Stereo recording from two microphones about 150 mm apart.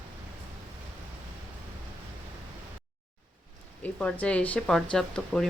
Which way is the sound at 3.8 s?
10° left (ahead or behind).